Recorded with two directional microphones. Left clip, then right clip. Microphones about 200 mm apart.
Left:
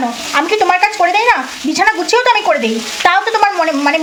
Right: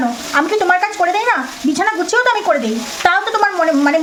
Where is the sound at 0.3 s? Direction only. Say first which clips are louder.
Left 2 dB; 10° right (ahead or behind).